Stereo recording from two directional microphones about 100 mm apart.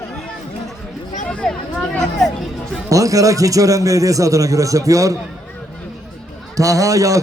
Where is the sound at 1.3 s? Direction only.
10° left (ahead or behind).